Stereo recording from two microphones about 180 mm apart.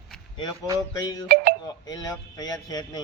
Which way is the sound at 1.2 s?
60° right (ahead or behind).